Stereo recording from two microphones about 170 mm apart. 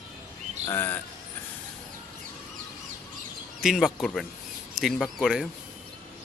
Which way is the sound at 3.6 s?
Centre (ahead or behind).